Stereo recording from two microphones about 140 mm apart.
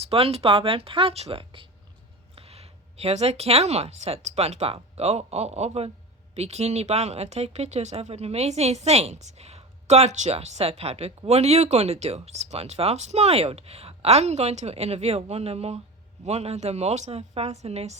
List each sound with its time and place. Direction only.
0.0 s speech: 45° right (ahead or behind)